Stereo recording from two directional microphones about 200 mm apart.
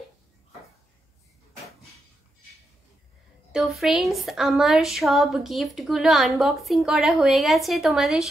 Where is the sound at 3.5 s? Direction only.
Centre (ahead or behind).